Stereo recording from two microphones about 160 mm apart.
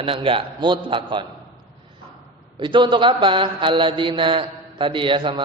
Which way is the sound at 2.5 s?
30° right (ahead or behind).